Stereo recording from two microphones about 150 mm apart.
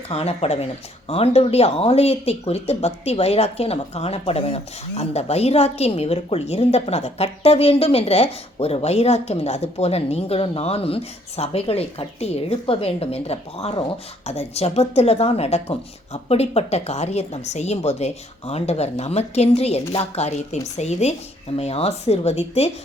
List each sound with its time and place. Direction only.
0.1 s speech: 45° left (ahead or behind)